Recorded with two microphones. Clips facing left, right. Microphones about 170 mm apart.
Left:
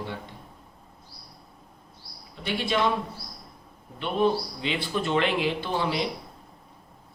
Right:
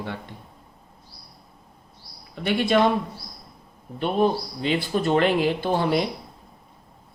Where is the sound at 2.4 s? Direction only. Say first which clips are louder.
Right 7 dB; 50° right (ahead or behind).